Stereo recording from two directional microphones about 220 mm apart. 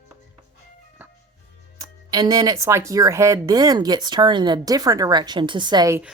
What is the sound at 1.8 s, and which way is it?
Speech, 15° right (ahead or behind).